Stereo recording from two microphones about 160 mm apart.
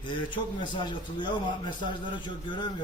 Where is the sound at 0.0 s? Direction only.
30° left (ahead or behind).